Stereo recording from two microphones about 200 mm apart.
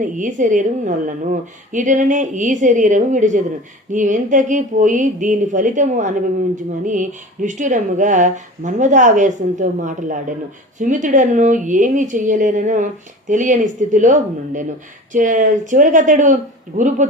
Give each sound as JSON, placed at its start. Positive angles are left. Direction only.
{"t": 0.0, "sound": "a woman's voice", "side_deg": -40}